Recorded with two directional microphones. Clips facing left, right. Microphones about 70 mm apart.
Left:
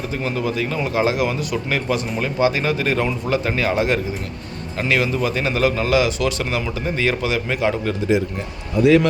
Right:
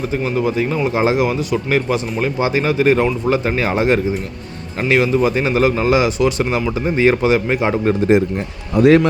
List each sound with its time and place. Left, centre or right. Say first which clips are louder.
0.1 s a man's voice: right 4 dB; centre
4.9 s a man's voice: right 6 dB; centre
8.7 s speech: right 3 dB; right